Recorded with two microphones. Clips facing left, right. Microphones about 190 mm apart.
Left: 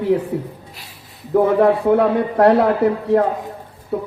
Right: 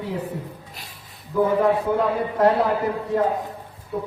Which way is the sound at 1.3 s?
60° left (ahead or behind).